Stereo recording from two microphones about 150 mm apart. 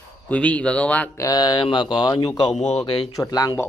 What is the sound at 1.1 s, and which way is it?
Speech, 25° left (ahead or behind).